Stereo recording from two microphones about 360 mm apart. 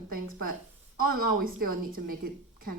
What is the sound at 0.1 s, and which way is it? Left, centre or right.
A woman's voice, right.